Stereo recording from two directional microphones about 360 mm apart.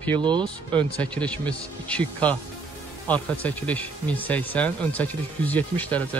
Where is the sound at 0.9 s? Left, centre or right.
Centre.